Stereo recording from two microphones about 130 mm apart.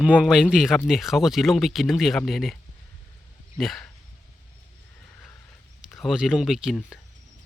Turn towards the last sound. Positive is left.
turn(degrees=-5)  # may be behind; listen again after turning